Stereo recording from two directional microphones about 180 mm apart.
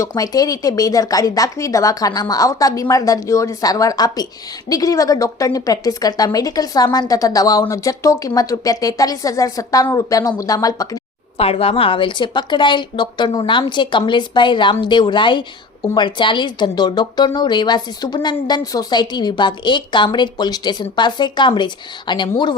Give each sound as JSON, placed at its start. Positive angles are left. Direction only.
{"t": 0.0, "sound": "a woman's voice", "side_deg": 20}
{"t": 11.3, "sound": "a woman's voice", "side_deg": 35}